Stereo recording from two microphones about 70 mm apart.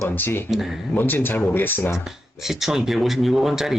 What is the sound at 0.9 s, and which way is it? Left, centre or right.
Speech, left.